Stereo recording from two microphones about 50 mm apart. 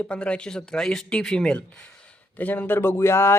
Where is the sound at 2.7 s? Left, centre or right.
Left.